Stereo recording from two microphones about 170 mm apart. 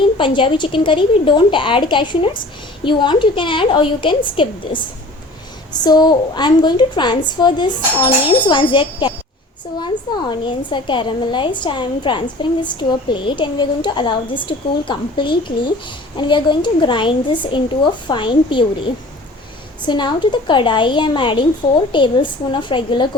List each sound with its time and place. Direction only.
0.2 s a child's voice: 30° left (ahead or behind)
19.8 s a child's voice: 25° left (ahead or behind)